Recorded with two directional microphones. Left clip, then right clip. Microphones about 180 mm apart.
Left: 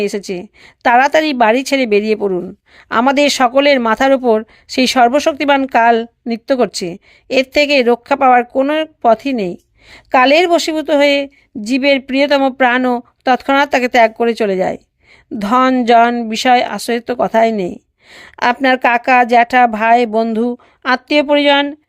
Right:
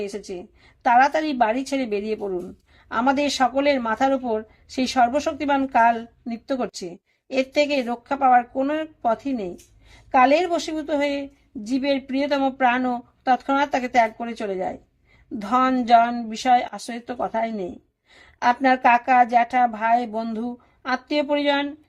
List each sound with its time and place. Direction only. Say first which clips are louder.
0.0 s a woman's voice: left 12 dB; 40° left (ahead or behind)